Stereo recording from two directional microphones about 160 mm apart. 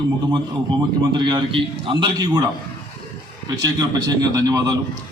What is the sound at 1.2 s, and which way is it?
A man's voice, 30° right (ahead or behind).